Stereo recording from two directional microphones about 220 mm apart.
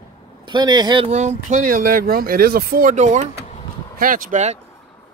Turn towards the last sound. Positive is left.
turn(degrees=-35)  # may be behind; listen again after turning